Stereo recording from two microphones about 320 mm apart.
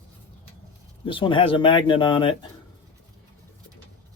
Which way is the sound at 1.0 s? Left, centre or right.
Centre.